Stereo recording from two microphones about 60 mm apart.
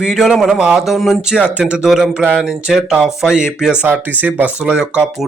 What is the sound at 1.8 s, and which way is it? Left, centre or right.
Speech, centre.